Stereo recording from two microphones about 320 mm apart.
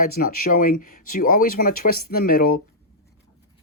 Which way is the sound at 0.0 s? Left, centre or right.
Left.